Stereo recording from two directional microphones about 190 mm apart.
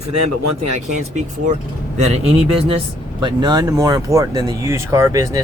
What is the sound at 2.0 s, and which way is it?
Speech, 35° right (ahead or behind).